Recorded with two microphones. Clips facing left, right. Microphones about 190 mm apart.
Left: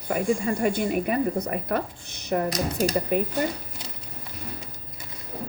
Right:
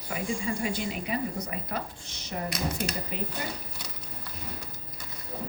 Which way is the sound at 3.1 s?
55° left (ahead or behind).